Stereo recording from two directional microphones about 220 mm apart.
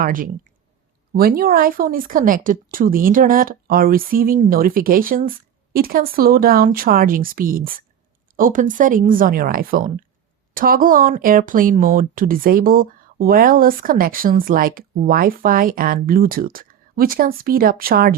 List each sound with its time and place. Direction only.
0.0 s speech: 40° right (ahead or behind)